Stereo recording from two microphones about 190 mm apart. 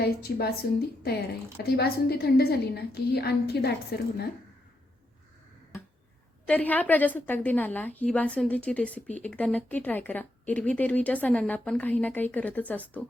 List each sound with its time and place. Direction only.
0.0 s a woman's voice: 55° left (ahead or behind)
6.4 s a woman's voice: 10° left (ahead or behind)